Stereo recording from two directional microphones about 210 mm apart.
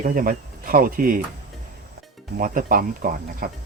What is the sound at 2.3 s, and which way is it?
Speech, 40° right (ahead or behind).